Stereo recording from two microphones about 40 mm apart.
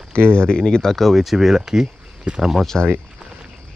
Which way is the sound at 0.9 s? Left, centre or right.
Centre.